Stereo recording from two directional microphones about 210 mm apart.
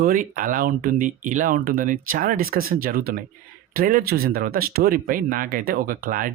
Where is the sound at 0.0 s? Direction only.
40° right (ahead or behind).